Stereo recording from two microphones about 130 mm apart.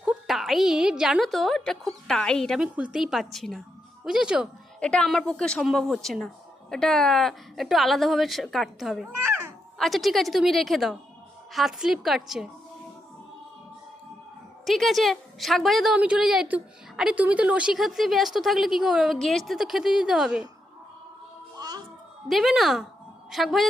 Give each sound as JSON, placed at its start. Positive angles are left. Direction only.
{"t": 0.0, "sound": "a woman's voice", "side_deg": -5}
{"t": 2.7, "sound": "a woman's voice", "side_deg": -5}
{"t": 4.8, "sound": "a woman's voice", "side_deg": 5}
{"t": 14.6, "sound": "a woman's voice", "side_deg": 0}
{"t": 21.6, "sound": "music", "side_deg": -30}
{"t": 22.3, "sound": "a woman's voice", "side_deg": 0}